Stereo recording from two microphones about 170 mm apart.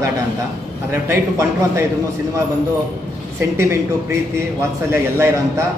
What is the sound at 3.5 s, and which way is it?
A man's voice, 15° right (ahead or behind).